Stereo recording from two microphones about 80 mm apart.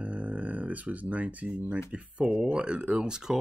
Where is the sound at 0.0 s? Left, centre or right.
Centre.